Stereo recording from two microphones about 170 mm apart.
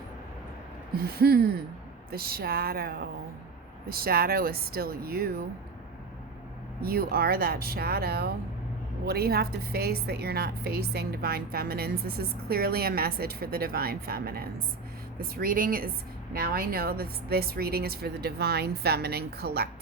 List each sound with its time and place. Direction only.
0.9 s a woman's voice: 65° right (ahead or behind)
6.8 s a woman's voice: 65° right (ahead or behind)